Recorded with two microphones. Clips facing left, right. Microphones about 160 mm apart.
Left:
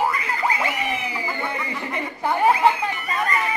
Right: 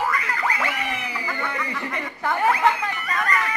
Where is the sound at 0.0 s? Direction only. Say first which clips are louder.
Left 2 dB; 20° left (ahead or behind).